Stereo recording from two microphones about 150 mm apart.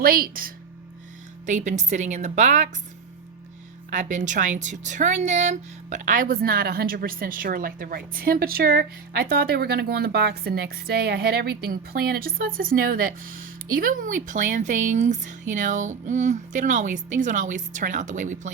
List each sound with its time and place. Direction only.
0.0 s speech: 80° right
1.5 s a woman's voice: 55° right (ahead or behind)
3.8 s a woman's voice: 60° right (ahead or behind)